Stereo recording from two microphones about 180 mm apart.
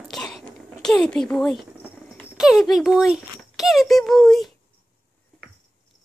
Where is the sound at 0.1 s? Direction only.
Centre (ahead or behind).